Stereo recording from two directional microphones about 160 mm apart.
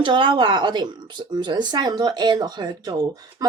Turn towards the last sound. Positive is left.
turn(degrees=-25)  # may be behind; listen again after turning